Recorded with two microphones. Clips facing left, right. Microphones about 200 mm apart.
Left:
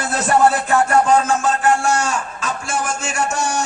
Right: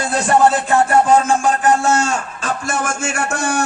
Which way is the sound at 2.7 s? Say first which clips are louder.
Even; 55° right (ahead or behind).